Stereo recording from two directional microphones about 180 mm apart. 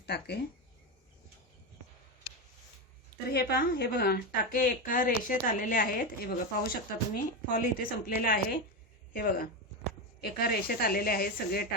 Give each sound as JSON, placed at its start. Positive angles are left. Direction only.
{"t": 0.0, "sound": "speech", "side_deg": 65}
{"t": 3.2, "sound": "a woman's voice", "side_deg": 60}